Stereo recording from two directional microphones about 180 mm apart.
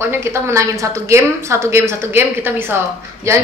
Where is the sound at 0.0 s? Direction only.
15° right (ahead or behind).